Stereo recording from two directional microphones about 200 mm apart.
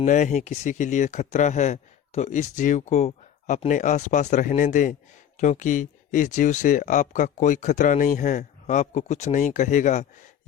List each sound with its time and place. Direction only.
0.0 s speech: 40° left (ahead or behind)